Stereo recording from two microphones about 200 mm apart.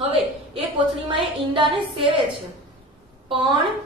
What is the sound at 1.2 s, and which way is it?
A woman's voice, 25° right (ahead or behind).